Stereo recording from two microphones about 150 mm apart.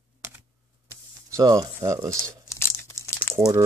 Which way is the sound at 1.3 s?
25° right (ahead or behind).